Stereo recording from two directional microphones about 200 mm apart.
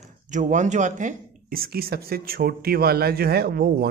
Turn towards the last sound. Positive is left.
turn(degrees=-50)  # may be behind; listen again after turning